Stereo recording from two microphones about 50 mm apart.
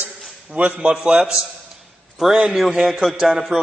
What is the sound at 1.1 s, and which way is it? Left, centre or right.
Speech, centre.